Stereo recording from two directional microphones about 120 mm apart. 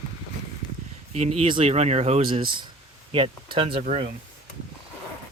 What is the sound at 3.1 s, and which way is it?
Speech, 45° right (ahead or behind).